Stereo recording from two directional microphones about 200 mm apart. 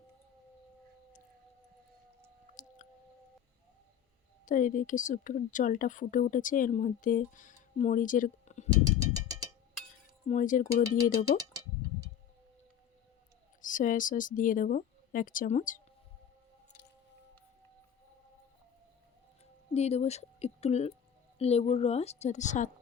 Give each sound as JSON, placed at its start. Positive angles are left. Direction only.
{"t": 2.6, "sound": "chewing", "side_deg": 40}
{"t": 4.4, "sound": "speech", "side_deg": 40}
{"t": 8.7, "sound": "a sound", "side_deg": -20}
{"t": 10.2, "sound": "speech", "side_deg": 40}
{"t": 13.6, "sound": "speech", "side_deg": 40}
{"t": 19.7, "sound": "speech", "side_deg": 30}